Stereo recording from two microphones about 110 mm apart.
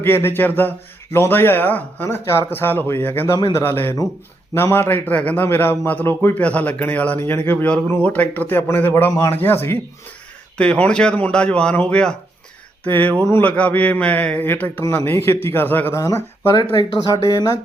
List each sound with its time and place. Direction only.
0.0 s a man's voice: 20° left (ahead or behind)
10.6 s a man's voice: 10° left (ahead or behind)
16.0 s speech: 25° left (ahead or behind)